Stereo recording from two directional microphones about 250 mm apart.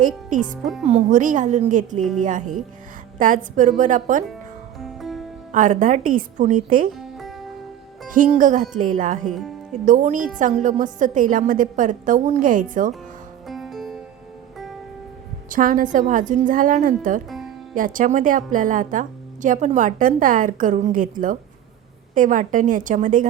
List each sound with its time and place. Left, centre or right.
0.3 s a woman's voice: right
4.8 s music: centre
5.5 s a woman's voice: right
8.1 s a woman's voice: right
13.5 s music: centre
15.4 s a woman's voice: right
17.2 s music: centre
17.7 s a woman's voice: right